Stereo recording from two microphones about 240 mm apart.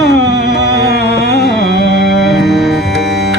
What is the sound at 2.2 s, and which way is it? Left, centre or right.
Music, centre.